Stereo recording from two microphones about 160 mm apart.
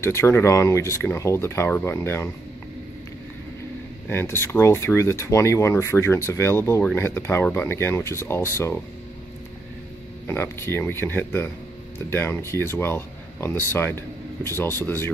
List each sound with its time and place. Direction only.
0.0 s speech: 15° left (ahead or behind)
4.1 s speech: 15° left (ahead or behind)
10.2 s speech: 15° left (ahead or behind)